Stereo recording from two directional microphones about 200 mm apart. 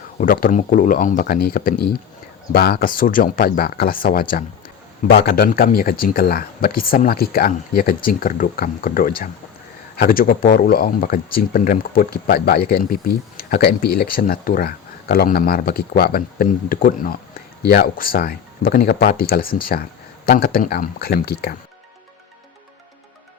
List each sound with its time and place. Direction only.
0.2 s speech: 45° left (ahead or behind)